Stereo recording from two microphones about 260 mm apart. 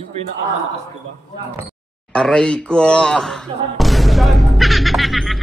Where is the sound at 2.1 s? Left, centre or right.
Centre.